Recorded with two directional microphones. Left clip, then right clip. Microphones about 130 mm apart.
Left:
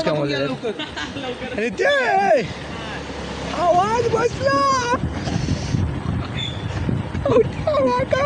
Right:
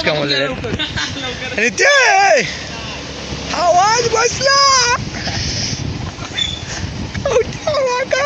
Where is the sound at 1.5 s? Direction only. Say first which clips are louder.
Right 7 dB; centre (ahead or behind).